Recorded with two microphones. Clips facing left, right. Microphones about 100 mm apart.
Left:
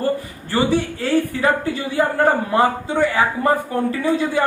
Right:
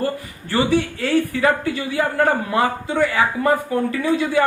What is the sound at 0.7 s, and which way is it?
Speech, 35° left (ahead or behind).